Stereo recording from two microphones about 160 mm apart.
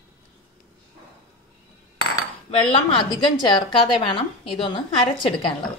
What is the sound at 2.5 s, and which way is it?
A woman's voice, 35° left (ahead or behind).